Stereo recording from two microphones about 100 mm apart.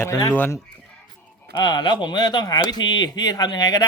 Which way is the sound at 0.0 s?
35° left (ahead or behind).